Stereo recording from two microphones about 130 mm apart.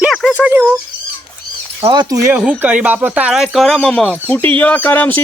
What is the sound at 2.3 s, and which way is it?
Speech, 10° right (ahead or behind).